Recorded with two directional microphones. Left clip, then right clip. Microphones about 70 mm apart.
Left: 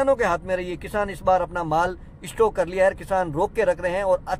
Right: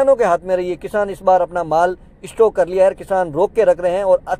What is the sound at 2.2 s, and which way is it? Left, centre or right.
Speech, right.